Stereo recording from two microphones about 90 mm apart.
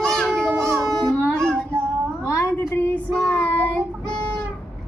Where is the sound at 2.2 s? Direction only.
35° left (ahead or behind).